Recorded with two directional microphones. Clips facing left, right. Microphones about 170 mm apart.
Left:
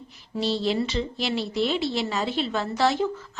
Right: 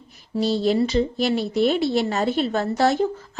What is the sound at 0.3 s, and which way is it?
A woman's voice, 45° right (ahead or behind).